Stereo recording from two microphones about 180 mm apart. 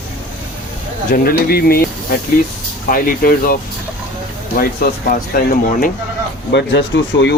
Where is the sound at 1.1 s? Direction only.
55° left (ahead or behind).